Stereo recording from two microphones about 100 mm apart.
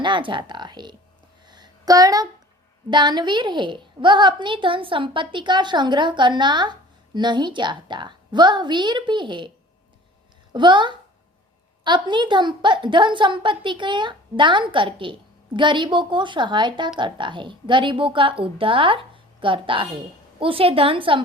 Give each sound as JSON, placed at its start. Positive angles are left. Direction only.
{"t": 0.0, "sound": "speech", "side_deg": -55}
{"t": 1.5, "sound": "a sound", "side_deg": -45}
{"t": 2.9, "sound": "a woman's voice", "side_deg": -45}
{"t": 10.5, "sound": "a woman's voice", "side_deg": -50}